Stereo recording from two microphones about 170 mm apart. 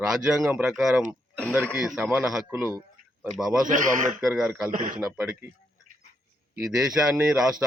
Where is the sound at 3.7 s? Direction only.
50° right (ahead or behind).